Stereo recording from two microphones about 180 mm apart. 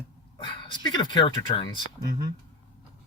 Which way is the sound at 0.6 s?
25° left (ahead or behind).